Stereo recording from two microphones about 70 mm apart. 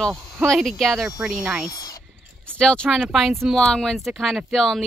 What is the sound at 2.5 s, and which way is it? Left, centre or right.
Speech, centre.